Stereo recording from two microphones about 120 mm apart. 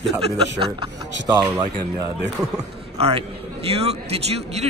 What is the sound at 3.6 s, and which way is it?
A man's voice, 55° right (ahead or behind).